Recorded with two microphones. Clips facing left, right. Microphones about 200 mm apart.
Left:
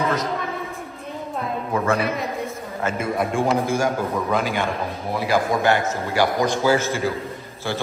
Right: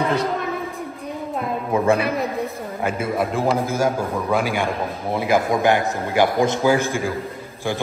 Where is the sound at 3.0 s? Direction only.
Centre (ahead or behind).